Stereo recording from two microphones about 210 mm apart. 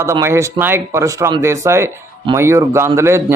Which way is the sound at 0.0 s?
15° right (ahead or behind).